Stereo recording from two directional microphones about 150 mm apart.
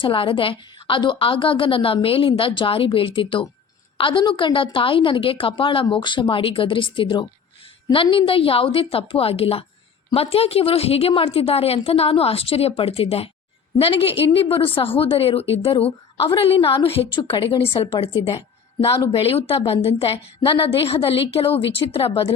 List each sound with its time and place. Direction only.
0.0 s a woman's voice: 35° left (ahead or behind)